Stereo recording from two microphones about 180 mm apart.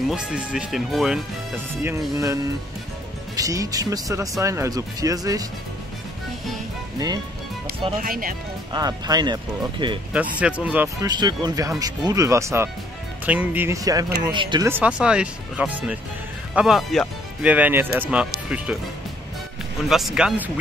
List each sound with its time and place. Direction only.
0.0 s speech: 5° right (ahead or behind)
1.7 s speech: 15° right (ahead or behind)
8.0 s speech: 50° right (ahead or behind)
8.7 s speech: 20° right (ahead or behind)
10.1 s speech: 5° right (ahead or behind)
11.1 s speech: 25° right (ahead or behind)
14.7 s speech: 5° right (ahead or behind)
19.9 s speech: centre (ahead or behind)